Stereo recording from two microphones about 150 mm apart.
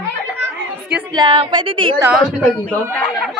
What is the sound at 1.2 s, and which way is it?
Speech, 30° right (ahead or behind).